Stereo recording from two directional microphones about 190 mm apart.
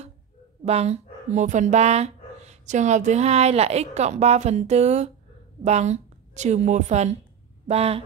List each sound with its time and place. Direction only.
0.7 s a woman's voice: 35° right (ahead or behind)